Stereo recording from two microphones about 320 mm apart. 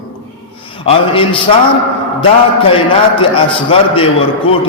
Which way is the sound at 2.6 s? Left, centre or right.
Centre.